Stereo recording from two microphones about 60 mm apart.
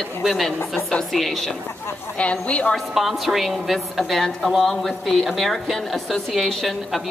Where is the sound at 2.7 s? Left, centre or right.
Centre.